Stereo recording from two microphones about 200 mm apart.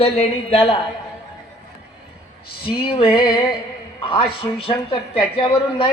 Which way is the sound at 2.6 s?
25° left (ahead or behind).